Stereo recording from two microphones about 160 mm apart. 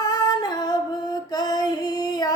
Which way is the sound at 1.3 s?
25° left (ahead or behind).